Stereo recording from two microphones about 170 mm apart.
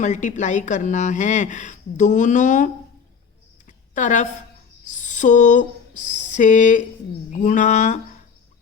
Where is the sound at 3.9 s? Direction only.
45° left (ahead or behind).